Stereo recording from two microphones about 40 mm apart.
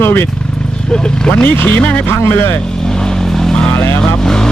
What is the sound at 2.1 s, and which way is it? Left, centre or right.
Speech, left.